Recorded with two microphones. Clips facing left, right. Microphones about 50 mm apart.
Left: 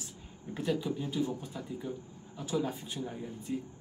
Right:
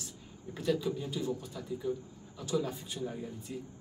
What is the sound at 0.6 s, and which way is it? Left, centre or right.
A man's voice, centre.